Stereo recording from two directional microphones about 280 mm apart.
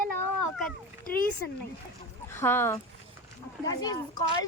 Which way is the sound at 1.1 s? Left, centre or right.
Left.